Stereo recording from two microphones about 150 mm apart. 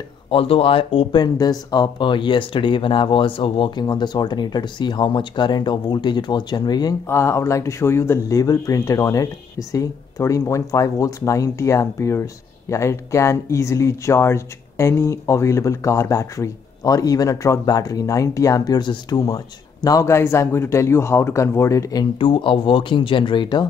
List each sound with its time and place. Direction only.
0.3 s speech: 40° left (ahead or behind); by 22.0 s 20° left (ahead or behind)
22.2 s speech: 35° left (ahead or behind)